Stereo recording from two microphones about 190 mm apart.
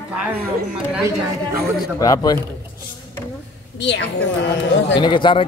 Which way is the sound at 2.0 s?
20° left (ahead or behind).